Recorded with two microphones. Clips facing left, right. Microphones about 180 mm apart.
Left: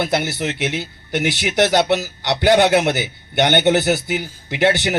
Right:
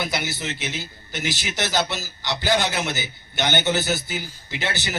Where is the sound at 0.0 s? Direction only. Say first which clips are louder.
Left 7 dB; 55° left (ahead or behind).